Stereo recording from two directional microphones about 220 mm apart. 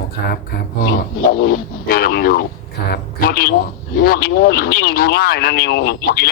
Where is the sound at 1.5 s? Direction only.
40° left (ahead or behind).